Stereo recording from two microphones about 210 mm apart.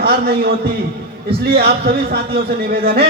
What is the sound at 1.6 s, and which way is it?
A man's voice, 45° right (ahead or behind).